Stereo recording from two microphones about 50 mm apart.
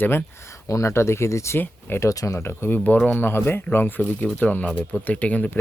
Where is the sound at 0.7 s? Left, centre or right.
Left.